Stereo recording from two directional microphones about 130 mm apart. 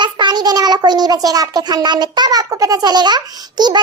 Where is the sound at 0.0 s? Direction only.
35° right (ahead or behind).